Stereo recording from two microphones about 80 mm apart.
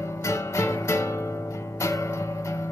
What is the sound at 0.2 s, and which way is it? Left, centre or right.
Music, left.